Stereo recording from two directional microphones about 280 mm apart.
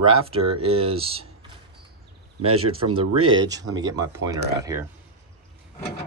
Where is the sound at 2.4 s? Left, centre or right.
Right.